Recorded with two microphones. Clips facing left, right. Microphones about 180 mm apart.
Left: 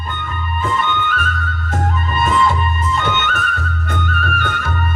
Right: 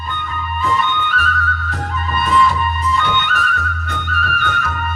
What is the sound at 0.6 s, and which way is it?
Music, 50° left (ahead or behind).